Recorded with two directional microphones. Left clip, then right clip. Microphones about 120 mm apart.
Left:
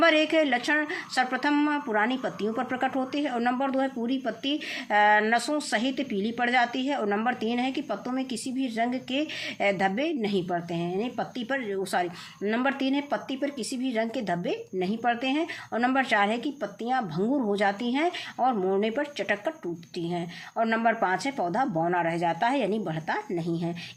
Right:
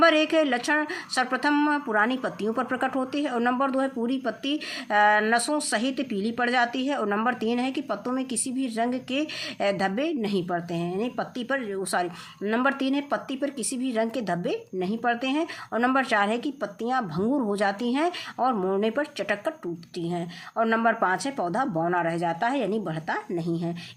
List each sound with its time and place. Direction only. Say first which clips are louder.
0.0 s speech: right 2 dB; 35° right (ahead or behind)
21.8 s a woman's voice: right 1 dB; 25° right (ahead or behind)